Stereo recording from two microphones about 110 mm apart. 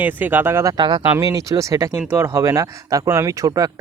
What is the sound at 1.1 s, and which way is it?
Speech, 30° right (ahead or behind).